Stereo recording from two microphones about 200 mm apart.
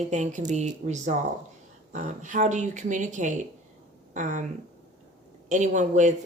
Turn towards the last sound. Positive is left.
turn(degrees=-35)  # may be behind; listen again after turning